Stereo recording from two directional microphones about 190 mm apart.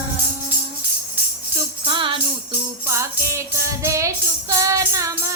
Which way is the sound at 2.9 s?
15° right (ahead or behind).